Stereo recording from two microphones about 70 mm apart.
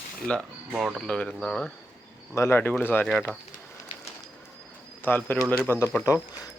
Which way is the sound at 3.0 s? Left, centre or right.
Centre.